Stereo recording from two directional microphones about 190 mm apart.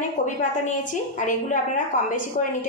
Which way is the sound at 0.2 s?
40° left (ahead or behind).